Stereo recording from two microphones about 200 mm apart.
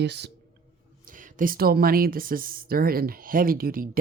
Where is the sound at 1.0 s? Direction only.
40° right (ahead or behind).